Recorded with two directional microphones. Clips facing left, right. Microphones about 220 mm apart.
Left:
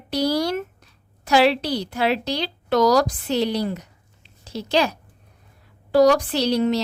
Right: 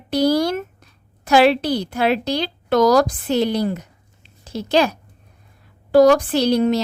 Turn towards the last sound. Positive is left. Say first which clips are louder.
# right 3 dB
turn(degrees=-50)  # may be behind; listen again after turning